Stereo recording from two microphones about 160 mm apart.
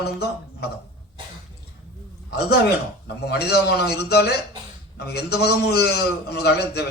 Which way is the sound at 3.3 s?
90° left.